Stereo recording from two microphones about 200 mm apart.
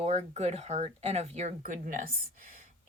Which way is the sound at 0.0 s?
35° right (ahead or behind).